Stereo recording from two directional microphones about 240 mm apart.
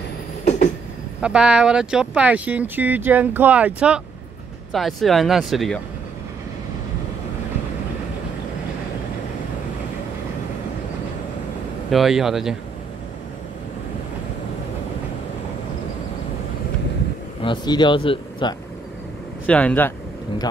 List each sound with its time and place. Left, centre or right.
1.2 s speech: centre
11.9 s speech: centre
17.4 s speech: centre
19.4 s speech: centre